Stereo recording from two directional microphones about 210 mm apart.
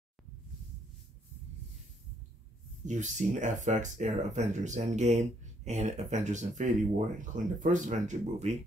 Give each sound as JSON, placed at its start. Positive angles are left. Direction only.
{"t": 2.9, "sound": "speech", "side_deg": -35}